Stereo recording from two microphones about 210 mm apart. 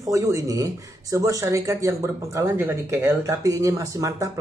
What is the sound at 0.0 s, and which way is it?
Speech, 15° right (ahead or behind).